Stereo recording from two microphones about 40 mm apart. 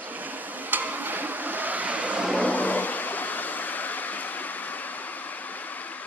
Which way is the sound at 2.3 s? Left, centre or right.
Left.